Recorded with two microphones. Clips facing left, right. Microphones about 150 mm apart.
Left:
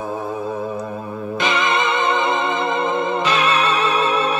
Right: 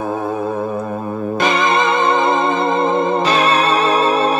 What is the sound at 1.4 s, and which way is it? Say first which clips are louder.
Music: right 4 dB; 40° right (ahead or behind).